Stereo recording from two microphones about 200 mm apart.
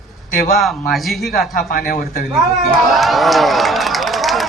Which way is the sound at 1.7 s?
45° left (ahead or behind).